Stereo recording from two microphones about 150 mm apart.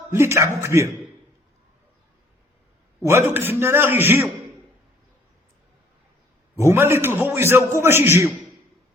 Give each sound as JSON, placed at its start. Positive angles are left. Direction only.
{"t": 0.1, "sound": "a man's voice", "side_deg": -15}
{"t": 3.1, "sound": "a man's voice", "side_deg": -15}
{"t": 6.6, "sound": "a man's voice", "side_deg": -15}